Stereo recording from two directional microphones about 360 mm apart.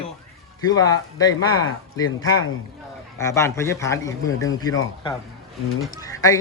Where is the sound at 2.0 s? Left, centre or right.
Left.